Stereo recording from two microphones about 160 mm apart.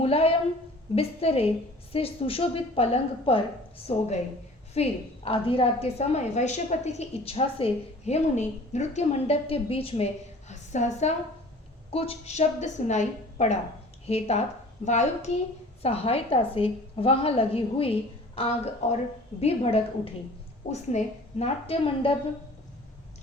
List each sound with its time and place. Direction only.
0.0 s a woman's voice: 40° left (ahead or behind)
10.5 s a woman's voice: 45° left (ahead or behind)